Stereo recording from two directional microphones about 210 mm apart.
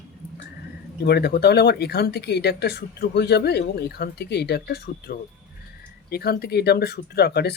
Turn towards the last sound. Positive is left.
turn(degrees=50)  # may be behind; listen again after turning